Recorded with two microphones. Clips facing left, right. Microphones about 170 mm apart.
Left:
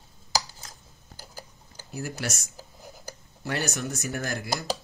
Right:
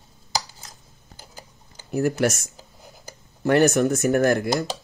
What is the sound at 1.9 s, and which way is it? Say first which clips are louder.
Speech: right 12 dB; 60° right (ahead or behind).